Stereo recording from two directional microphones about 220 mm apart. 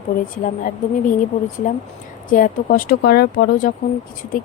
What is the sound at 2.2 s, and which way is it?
Speech, 40° left (ahead or behind).